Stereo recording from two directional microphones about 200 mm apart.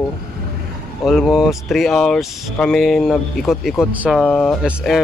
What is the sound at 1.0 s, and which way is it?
Speech, centre (ahead or behind).